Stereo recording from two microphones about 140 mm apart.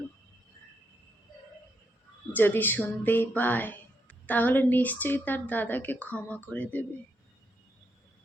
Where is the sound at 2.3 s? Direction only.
15° left (ahead or behind).